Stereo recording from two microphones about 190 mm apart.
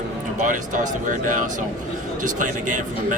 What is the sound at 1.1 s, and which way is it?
Speech, 45° right (ahead or behind).